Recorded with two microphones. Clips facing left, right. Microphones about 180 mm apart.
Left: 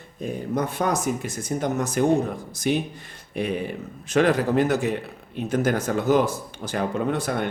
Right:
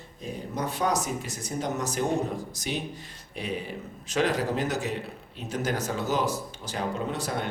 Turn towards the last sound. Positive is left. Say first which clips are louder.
# left 6 dB
turn(degrees=60)  # may be behind; listen again after turning